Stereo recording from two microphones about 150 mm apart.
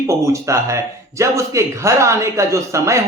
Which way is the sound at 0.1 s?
20° right (ahead or behind).